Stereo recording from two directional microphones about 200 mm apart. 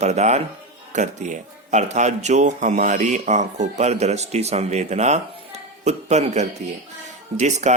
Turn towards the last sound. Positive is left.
turn(degrees=-35)  # may be behind; listen again after turning